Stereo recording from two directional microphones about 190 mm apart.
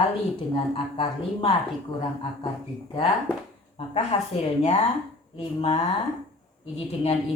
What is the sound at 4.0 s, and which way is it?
A woman's voice, 35° left (ahead or behind).